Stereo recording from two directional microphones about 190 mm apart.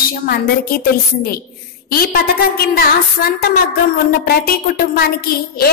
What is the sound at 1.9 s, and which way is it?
A woman's voice, 50° left (ahead or behind).